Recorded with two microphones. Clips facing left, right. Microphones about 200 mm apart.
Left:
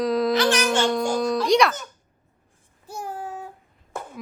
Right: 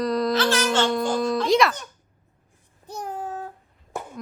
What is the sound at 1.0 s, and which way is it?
Music, 5° left (ahead or behind).